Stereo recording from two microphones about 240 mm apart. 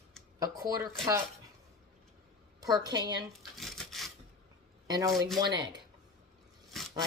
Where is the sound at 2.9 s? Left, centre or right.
Centre.